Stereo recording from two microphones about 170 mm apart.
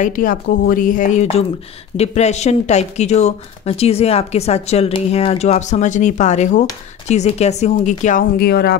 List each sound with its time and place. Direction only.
0.0 s speech: 50° left (ahead or behind); by 8.7 s 70° left (ahead or behind)